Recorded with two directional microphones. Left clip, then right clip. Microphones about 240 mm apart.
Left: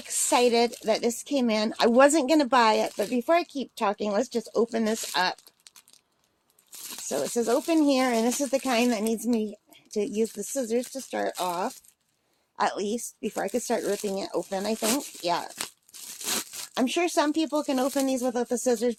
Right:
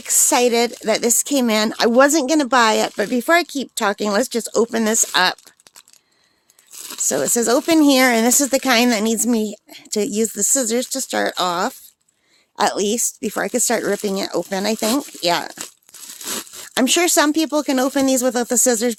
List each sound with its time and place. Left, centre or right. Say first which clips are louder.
0.0 s speech: right 7 dB; right
7.1 s speech: right 8 dB; right
16.7 s speech: right 9 dB; right